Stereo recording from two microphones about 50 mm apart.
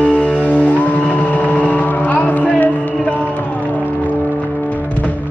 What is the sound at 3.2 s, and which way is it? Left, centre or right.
Music, left.